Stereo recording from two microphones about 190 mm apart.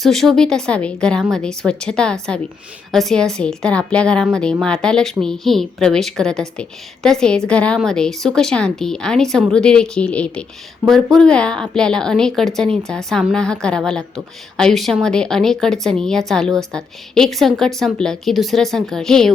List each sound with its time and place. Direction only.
0.0 s a woman's voice: centre (ahead or behind)